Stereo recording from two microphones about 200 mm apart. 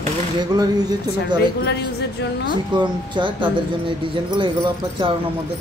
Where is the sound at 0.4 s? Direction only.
20° right (ahead or behind).